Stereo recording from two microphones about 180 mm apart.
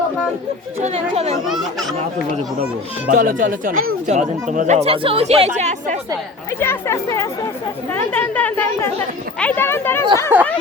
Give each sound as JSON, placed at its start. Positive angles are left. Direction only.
{"t": 0.8, "sound": "speech", "side_deg": -35}
{"t": 3.1, "sound": "speech", "side_deg": -50}
{"t": 6.6, "sound": "a woman's voice", "side_deg": 15}
{"t": 10.3, "sound": "a sound", "side_deg": -10}